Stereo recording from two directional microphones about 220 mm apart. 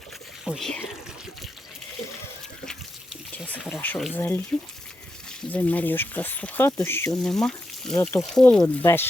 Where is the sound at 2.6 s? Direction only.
Centre (ahead or behind).